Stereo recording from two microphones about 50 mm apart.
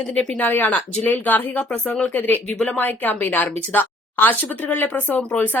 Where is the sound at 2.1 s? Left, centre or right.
Left.